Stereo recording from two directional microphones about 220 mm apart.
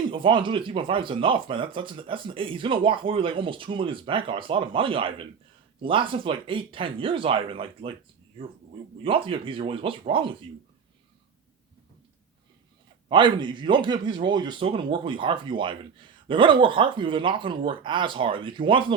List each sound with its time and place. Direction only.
0.1 s speech: 20° right (ahead or behind)
9.0 s speech: 25° right (ahead or behind)
13.1 s speech: 20° right (ahead or behind)